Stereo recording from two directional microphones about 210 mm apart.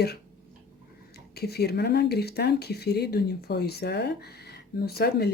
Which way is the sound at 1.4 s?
50° left (ahead or behind).